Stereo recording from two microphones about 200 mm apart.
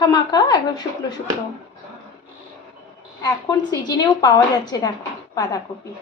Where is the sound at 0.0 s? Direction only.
20° left (ahead or behind).